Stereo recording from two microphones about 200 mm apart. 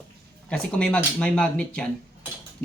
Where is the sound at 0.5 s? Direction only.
5° left (ahead or behind).